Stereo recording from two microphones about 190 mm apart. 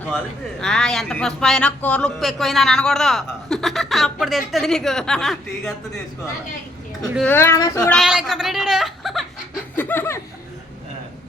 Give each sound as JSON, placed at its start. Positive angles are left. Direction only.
{"t": 0.6, "sound": "a man's voice", "side_deg": 5}
{"t": 7.0, "sound": "a man's voice", "side_deg": 0}
{"t": 7.3, "sound": "speech", "side_deg": 15}
{"t": 7.9, "sound": "speech", "side_deg": 0}
{"t": 9.7, "sound": "laughter", "side_deg": 10}